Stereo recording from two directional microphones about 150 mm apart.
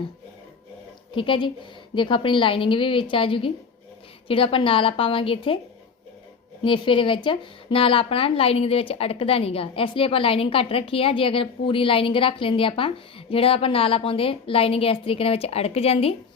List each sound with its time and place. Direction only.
1.1 s speech: 35° left (ahead or behind)
6.7 s speech: 35° left (ahead or behind)